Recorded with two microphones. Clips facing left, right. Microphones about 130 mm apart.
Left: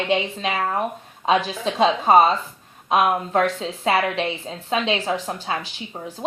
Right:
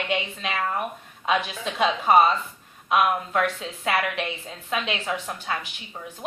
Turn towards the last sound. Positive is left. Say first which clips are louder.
# left 6 dB
turn(degrees=30)  # may be behind; listen again after turning